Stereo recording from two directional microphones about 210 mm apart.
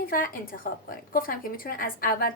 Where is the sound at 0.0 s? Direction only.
40° left (ahead or behind).